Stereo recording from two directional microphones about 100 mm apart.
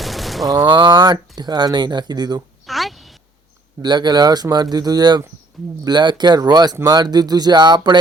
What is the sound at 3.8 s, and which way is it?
Speech, 45° right (ahead or behind).